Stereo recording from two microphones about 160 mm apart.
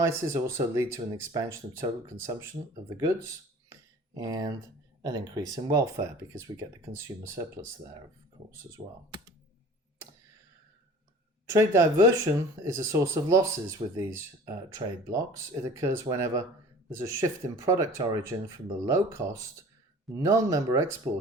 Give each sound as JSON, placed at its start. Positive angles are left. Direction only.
{"t": 0.0, "sound": "speech", "side_deg": -15}
{"t": 11.4, "sound": "speech", "side_deg": -20}